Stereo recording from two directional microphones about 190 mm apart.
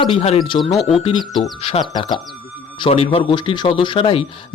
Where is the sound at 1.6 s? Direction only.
35° left (ahead or behind).